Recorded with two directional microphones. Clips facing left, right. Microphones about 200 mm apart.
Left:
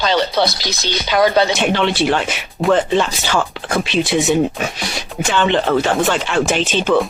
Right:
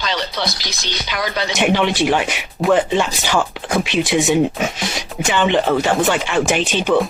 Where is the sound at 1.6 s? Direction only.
15° right (ahead or behind).